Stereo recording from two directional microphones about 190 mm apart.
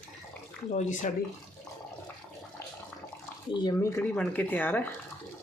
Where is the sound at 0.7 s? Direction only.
40° left (ahead or behind).